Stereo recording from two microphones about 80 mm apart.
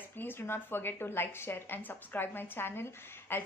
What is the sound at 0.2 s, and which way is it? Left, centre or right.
A woman's voice, left.